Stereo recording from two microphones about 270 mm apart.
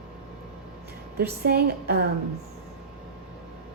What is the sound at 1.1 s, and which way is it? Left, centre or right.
Speech, right.